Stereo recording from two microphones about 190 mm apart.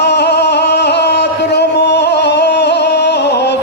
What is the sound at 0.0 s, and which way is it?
Music, 60° left (ahead or behind).